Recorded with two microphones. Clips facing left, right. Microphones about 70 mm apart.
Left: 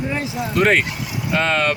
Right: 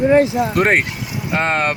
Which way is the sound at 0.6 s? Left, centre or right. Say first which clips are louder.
Left 3 dB; right.